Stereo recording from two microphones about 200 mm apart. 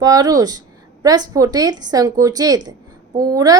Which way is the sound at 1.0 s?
20° right (ahead or behind).